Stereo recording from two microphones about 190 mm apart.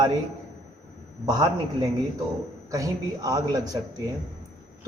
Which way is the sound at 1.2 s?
20° right (ahead or behind).